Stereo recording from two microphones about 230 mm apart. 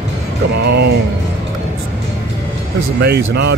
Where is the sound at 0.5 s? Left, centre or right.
Right.